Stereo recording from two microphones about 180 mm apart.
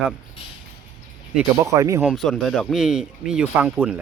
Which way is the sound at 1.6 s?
15° right (ahead or behind).